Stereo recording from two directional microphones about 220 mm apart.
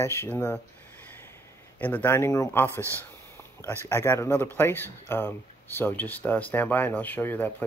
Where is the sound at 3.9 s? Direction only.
10° left (ahead or behind).